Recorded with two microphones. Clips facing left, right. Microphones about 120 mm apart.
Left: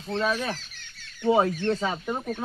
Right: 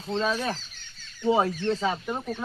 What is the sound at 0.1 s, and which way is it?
Speech, 20° right (ahead or behind).